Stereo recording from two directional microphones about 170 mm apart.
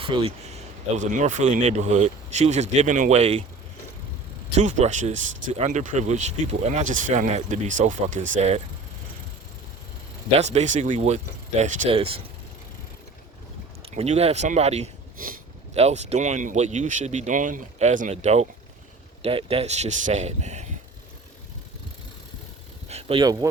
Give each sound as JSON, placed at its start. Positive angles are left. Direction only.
{"t": 0.0, "sound": "speech", "side_deg": -30}
{"t": 4.5, "sound": "speech", "side_deg": -45}
{"t": 10.3, "sound": "speech", "side_deg": -40}
{"t": 13.9, "sound": "speech", "side_deg": -40}
{"t": 22.9, "sound": "vehicle", "side_deg": -35}